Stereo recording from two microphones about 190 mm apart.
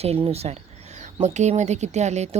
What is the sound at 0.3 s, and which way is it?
Speech, 35° right (ahead or behind).